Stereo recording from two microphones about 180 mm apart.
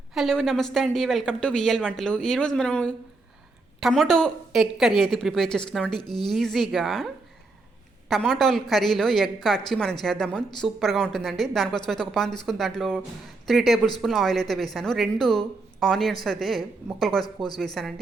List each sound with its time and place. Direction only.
0.1 s a woman's voice: centre (ahead or behind)
8.1 s a woman's voice: centre (ahead or behind)
17.2 s speech: 20° left (ahead or behind)
17.6 s a woman's voice: centre (ahead or behind)